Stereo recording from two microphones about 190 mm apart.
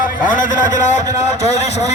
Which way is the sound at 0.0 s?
45° left (ahead or behind).